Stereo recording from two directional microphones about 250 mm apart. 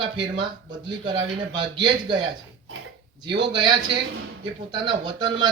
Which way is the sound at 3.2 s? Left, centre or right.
Centre.